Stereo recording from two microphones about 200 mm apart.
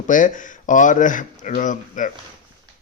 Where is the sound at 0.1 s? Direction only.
40° left (ahead or behind).